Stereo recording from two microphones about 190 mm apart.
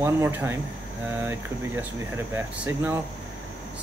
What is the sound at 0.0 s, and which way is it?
Speech, 10° right (ahead or behind).